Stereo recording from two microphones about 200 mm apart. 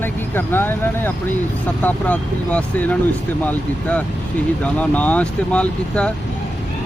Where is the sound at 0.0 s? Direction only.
10° left (ahead or behind).